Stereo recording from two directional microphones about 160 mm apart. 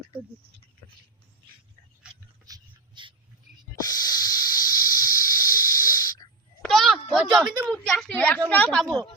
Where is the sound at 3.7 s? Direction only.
25° left (ahead or behind).